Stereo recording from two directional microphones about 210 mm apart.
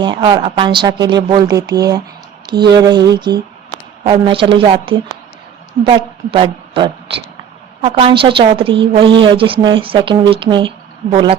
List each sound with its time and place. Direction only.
0.0 s a woman's voice: 20° right (ahead or behind)